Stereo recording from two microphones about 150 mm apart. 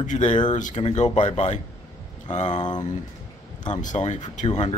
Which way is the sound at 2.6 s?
30° left (ahead or behind).